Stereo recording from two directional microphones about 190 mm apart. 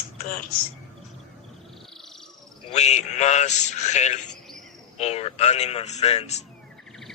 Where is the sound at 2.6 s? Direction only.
35° left (ahead or behind).